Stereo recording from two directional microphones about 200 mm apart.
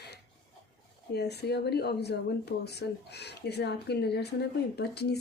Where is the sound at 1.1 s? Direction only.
55° left (ahead or behind).